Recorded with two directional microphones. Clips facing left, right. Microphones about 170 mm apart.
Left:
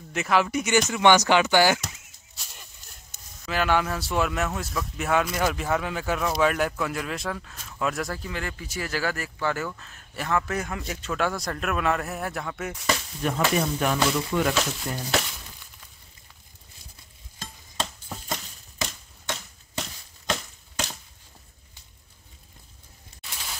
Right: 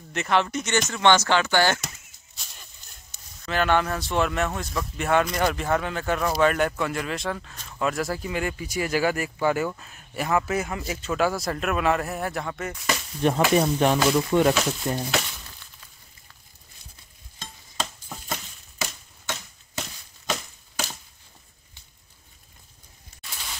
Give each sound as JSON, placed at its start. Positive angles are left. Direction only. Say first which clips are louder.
{"t": 0.1, "sound": "speech", "louder": "even", "side_deg": 5}
{"t": 1.8, "sound": "a sound", "louder": "even", "side_deg": 5}
{"t": 3.4, "sound": "speech", "louder": "right 1 dB", "side_deg": 5}
{"t": 8.2, "sound": "speech", "louder": "right 5 dB", "side_deg": -15}
{"t": 13.2, "sound": "speech", "louder": "right 6 dB", "side_deg": -30}
{"t": 15.1, "sound": "crumpling", "louder": "left 1 dB", "side_deg": 0}
{"t": 17.4, "sound": "a sound", "louder": "even", "side_deg": 0}